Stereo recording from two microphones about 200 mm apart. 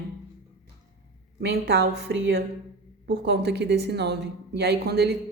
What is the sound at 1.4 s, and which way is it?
A woman's voice, 55° right (ahead or behind).